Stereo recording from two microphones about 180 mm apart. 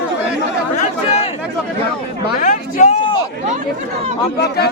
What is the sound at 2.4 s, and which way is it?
Speech, 45° left (ahead or behind).